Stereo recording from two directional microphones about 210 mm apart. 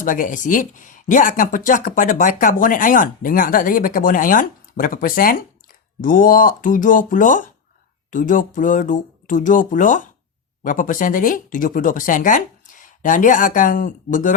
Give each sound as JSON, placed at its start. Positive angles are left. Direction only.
{"t": 0.0, "sound": "speech", "side_deg": 40}